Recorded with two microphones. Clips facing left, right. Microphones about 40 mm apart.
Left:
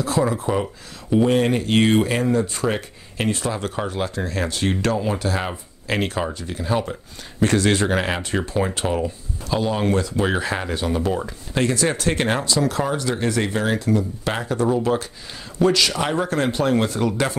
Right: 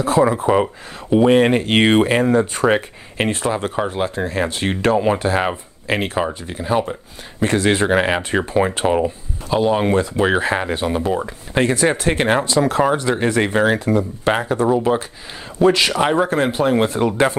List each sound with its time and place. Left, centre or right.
0.0 s speech: right
12.5 s speech: right
15.7 s speech: right